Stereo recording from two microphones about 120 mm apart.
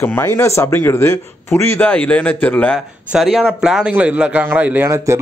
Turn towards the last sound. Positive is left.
turn(degrees=-15)  # may be behind; listen again after turning